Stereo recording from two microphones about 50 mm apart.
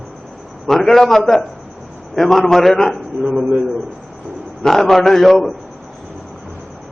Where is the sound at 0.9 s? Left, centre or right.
Centre.